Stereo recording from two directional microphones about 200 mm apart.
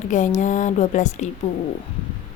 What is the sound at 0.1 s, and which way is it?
A woman's voice, 40° left (ahead or behind).